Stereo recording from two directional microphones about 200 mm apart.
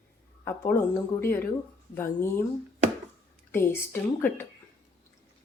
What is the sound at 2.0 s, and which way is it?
Speech, 10° left (ahead or behind).